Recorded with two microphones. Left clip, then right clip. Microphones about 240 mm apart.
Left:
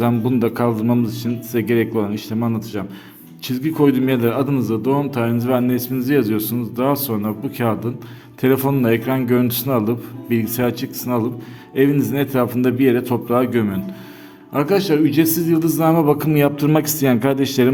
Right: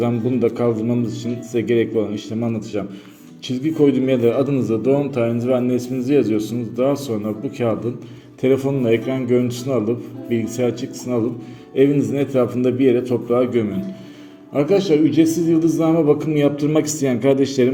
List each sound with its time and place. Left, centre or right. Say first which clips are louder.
0.0 s a man's voice: even; left